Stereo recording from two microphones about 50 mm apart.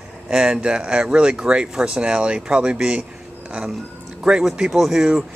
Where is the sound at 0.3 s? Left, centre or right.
Centre.